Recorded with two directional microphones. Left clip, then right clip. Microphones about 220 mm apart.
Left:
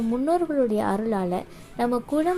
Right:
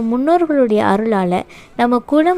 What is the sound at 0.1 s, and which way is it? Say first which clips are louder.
A woman's voice: right 10 dB; 30° right (ahead or behind).